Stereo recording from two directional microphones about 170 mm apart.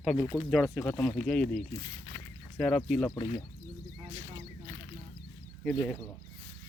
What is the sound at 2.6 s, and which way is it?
Speech, 5° left (ahead or behind).